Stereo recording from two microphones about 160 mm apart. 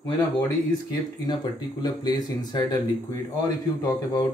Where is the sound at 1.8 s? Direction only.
25° left (ahead or behind).